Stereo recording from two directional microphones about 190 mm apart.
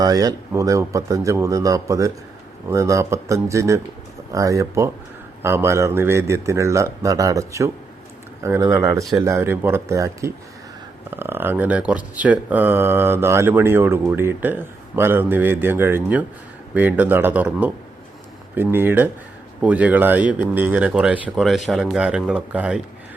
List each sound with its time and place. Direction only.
0.0 s speech: 20° right (ahead or behind)